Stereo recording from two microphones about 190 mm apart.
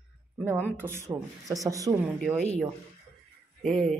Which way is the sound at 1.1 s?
20° right (ahead or behind).